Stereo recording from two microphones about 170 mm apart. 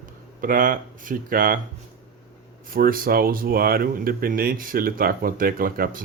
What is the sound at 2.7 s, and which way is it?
Speech, 55° right (ahead or behind).